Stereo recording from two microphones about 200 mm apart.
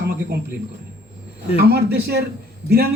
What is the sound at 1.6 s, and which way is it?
Speech, 55° right (ahead or behind).